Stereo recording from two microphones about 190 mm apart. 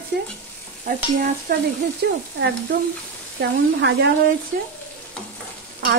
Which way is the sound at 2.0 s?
60° right (ahead or behind).